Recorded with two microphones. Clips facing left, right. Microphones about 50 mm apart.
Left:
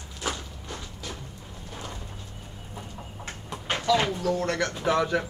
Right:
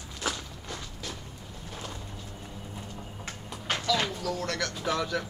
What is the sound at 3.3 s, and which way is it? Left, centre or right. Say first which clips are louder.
Speech: left 2 dB; left.